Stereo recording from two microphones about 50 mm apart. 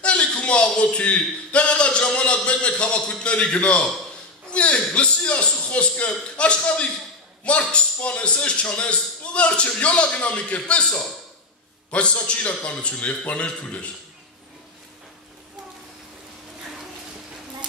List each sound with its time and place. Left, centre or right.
0.0 s a man's voice: left